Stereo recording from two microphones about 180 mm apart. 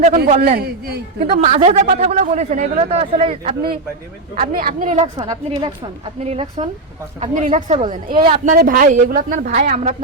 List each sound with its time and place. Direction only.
0.4 s a man's voice: 60° right (ahead or behind)
1.3 s speech: 35° right (ahead or behind)
4.4 s speech: 50° right (ahead or behind)
5.1 s a woman's voice: 25° right (ahead or behind)
6.1 s speech: 35° right (ahead or behind)
7.8 s a woman's voice: 30° right (ahead or behind)
8.3 s speech: 50° right (ahead or behind)